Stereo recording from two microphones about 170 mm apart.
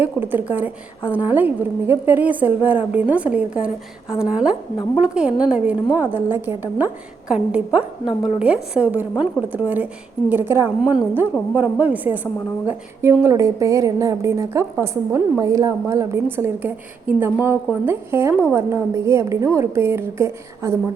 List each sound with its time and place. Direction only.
0.0 s a woman's voice: 10° right (ahead or behind)